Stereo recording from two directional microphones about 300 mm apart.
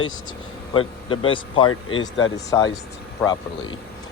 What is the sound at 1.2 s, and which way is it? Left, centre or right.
Speech, centre.